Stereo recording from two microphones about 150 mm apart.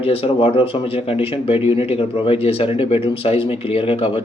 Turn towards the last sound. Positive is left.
turn(degrees=40)  # may be behind; listen again after turning